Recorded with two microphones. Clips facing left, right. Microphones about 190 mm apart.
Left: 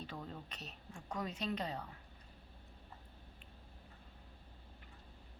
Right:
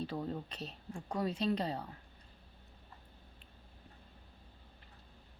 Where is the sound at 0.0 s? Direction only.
35° right (ahead or behind).